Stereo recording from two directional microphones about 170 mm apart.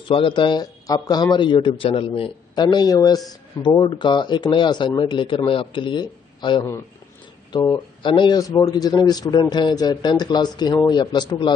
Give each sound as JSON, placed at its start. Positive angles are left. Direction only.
{"t": 0.1, "sound": "speech", "side_deg": 30}